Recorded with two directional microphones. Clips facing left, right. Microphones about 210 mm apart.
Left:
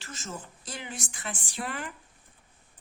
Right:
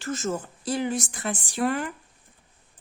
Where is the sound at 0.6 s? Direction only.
35° right (ahead or behind).